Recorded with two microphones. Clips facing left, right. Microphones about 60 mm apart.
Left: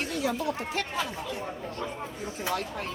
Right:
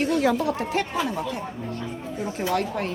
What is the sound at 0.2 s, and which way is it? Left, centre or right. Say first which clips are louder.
Speech: right 7 dB; right.